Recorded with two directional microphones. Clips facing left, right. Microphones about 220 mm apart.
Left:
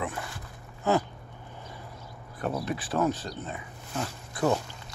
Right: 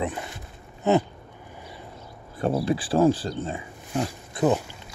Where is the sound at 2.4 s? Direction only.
30° right (ahead or behind).